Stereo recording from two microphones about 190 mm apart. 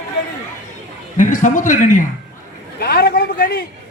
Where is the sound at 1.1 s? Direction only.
40° left (ahead or behind).